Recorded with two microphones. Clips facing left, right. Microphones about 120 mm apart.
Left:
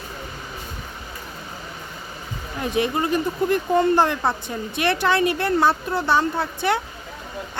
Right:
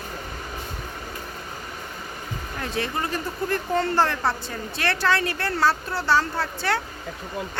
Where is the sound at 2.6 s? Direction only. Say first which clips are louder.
Left 6 dB; 15° left (ahead or behind).